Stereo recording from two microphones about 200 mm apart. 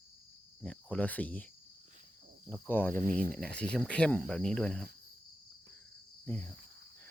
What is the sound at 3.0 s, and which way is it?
Speech, 45° right (ahead or behind).